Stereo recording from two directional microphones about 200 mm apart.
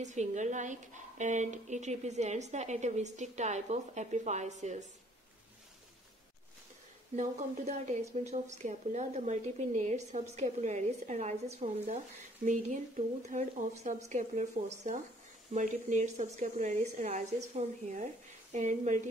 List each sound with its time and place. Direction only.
0.0 s a woman's voice: 35° right (ahead or behind)
7.2 s a woman's voice: 35° right (ahead or behind)